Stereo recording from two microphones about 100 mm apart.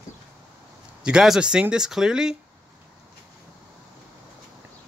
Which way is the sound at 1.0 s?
5° right (ahead or behind).